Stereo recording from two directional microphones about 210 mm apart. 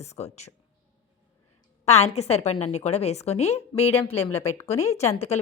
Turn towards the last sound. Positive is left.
turn(degrees=30)  # may be behind; listen again after turning